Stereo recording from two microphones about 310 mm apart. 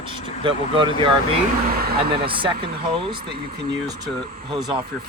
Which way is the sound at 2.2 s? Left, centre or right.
Centre.